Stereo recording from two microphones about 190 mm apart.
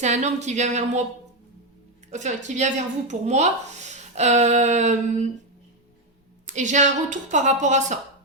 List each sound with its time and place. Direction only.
0.0 s speech: 35° right (ahead or behind)
2.0 s speech: 40° right (ahead or behind)
6.4 s speech: 40° right (ahead or behind)